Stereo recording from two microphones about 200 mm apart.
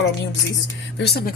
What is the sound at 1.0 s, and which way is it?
Speech, 55° left (ahead or behind).